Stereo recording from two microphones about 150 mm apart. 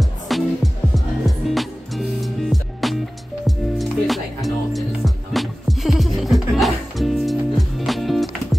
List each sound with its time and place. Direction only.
0.0 s music: centre (ahead or behind)